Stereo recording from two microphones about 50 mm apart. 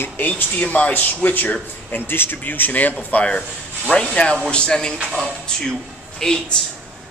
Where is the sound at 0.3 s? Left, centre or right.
Left.